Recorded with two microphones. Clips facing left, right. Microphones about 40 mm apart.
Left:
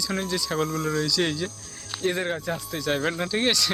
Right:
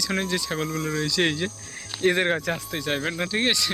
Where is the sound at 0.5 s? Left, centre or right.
Centre.